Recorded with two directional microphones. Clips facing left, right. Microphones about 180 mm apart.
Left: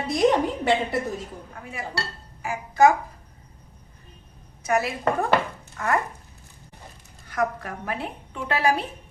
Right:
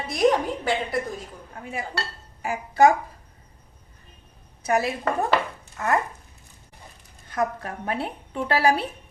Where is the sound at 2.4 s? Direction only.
30° right (ahead or behind).